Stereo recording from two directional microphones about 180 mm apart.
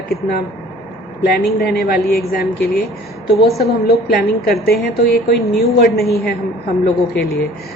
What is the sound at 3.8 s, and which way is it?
Speech, 60° left (ahead or behind).